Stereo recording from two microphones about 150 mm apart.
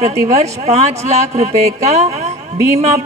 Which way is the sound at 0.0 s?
45° right (ahead or behind).